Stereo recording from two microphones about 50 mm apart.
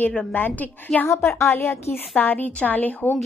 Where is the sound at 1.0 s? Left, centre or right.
Left.